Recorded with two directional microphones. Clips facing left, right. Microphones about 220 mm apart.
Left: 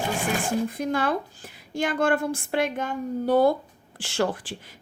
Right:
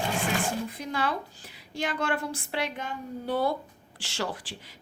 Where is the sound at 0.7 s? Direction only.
50° left (ahead or behind).